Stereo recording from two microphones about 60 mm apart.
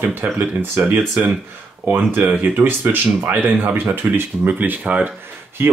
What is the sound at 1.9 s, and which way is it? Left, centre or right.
Speech, right.